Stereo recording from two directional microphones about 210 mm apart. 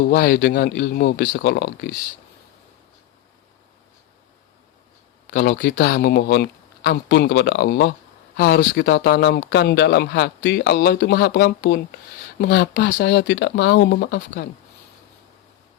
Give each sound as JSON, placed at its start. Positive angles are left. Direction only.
{"t": 0.0, "sound": "speech", "side_deg": 50}
{"t": 5.3, "sound": "speech", "side_deg": 50}